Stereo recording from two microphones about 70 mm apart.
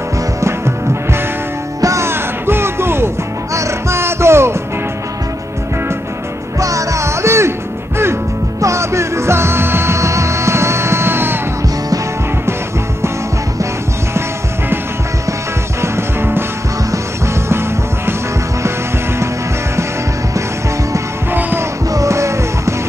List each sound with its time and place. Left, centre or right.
0.4 s music: right
1.8 s music: right
2.0 s music: right
6.6 s music: right
8.5 s music: right
15.8 s music: right
21.3 s music: right
21.9 s music: right